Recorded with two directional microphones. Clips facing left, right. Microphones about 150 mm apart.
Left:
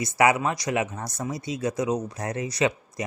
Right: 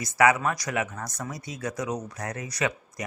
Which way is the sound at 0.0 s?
25° left (ahead or behind).